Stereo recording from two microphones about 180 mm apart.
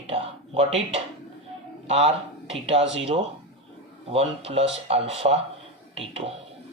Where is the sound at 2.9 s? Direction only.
35° right (ahead or behind).